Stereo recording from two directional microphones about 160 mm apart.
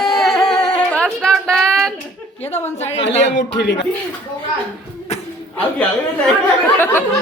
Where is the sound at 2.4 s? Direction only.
15° left (ahead or behind).